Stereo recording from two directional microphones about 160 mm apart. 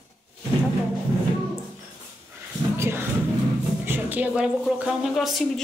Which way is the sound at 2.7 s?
15° right (ahead or behind).